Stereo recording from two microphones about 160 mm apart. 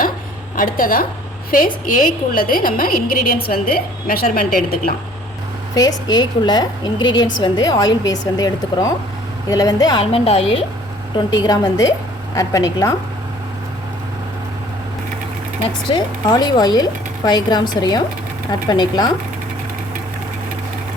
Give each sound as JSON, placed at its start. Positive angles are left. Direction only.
{"t": 0.5, "sound": "a woman's voice", "side_deg": 60}
{"t": 5.7, "sound": "a woman's voice", "side_deg": 25}
{"t": 15.9, "sound": "a woman's voice", "side_deg": 25}